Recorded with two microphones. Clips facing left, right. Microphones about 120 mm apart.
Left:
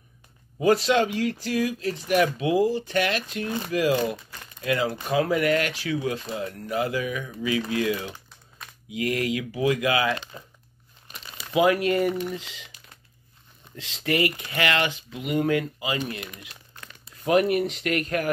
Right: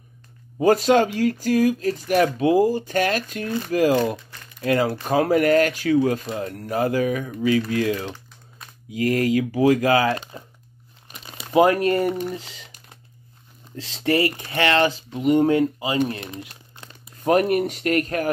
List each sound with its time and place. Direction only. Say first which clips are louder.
0.6 s speech: right 4 dB; 45° right (ahead or behind)
11.1 s crumpling: right 3 dB; 30° right (ahead or behind)
12.3 s speech: right 2 dB; 35° right (ahead or behind)
13.7 s speech: right 4 dB; 35° right (ahead or behind)
17.2 s speech: right 2 dB; 45° right (ahead or behind)